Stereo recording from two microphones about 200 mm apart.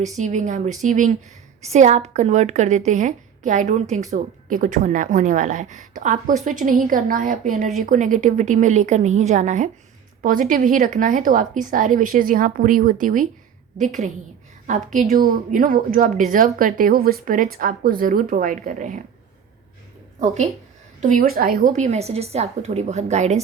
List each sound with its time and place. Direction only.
0.0 s a woman's voice: 35° right (ahead or behind)
14.7 s speech: 40° right (ahead or behind)
21.0 s a woman's voice: 40° right (ahead or behind)